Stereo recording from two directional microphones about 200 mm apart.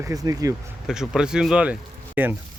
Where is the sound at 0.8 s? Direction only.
Centre (ahead or behind).